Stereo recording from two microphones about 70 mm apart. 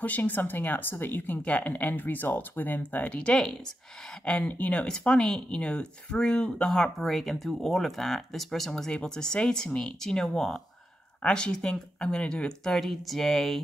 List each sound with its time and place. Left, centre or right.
0.0 s speech: left; by 13.6 s centre